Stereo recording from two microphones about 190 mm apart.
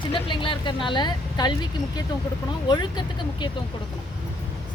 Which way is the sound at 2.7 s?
25° left (ahead or behind).